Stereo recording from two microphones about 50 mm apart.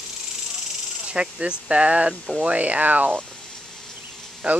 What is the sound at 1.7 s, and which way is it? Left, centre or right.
Speech, right.